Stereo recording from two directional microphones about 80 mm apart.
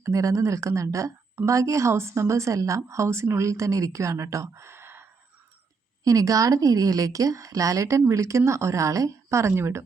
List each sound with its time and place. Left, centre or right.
0.0 s speech: right
6.1 s a woman's voice: right